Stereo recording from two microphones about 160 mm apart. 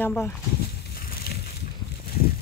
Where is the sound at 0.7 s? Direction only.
80° left.